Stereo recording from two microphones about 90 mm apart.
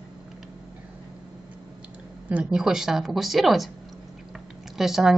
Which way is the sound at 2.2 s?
10° right (ahead or behind).